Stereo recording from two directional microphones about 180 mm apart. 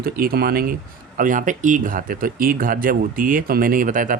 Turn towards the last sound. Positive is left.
turn(degrees=-50)  # may be behind; listen again after turning